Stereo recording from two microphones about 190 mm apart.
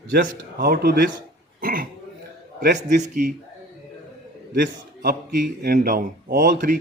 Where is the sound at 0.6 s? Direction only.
55° right (ahead or behind).